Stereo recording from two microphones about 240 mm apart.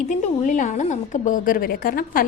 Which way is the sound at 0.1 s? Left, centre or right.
Left.